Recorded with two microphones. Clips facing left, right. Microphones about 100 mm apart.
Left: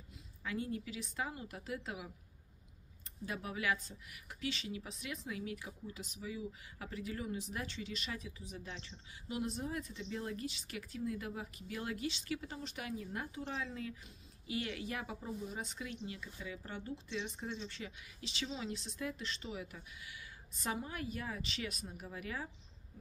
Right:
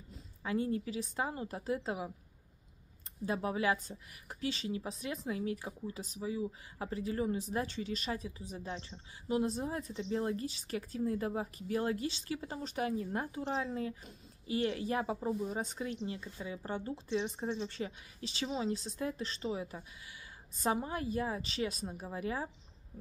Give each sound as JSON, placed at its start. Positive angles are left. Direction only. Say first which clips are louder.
{"t": 0.1, "sound": "a woman's voice", "louder": "right 6 dB", "side_deg": -35}
{"t": 3.3, "sound": "a woman's voice", "louder": "right 6 dB", "side_deg": -30}